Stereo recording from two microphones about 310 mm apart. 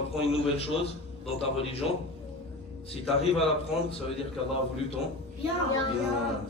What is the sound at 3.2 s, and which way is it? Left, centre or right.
Speech, centre.